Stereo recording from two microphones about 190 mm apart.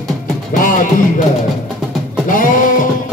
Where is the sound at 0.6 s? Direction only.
45° left (ahead or behind).